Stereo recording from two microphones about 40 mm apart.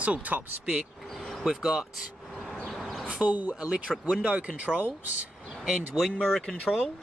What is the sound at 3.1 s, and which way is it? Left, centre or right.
Speech, right.